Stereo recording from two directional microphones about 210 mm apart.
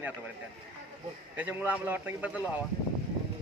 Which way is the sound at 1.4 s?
10° right (ahead or behind).